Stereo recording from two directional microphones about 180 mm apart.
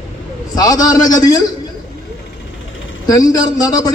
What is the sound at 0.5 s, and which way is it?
Speech, 20° left (ahead or behind).